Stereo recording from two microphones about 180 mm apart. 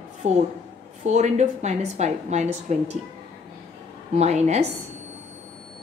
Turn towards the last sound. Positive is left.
turn(degrees=-40)  # may be behind; listen again after turning